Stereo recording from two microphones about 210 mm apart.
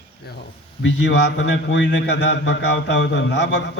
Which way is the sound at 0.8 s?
55° left (ahead or behind).